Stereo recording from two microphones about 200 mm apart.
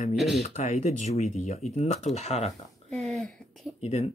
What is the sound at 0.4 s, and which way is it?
Speech, 35° left (ahead or behind).